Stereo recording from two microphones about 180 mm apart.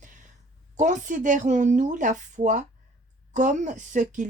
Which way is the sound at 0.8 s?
45° right (ahead or behind).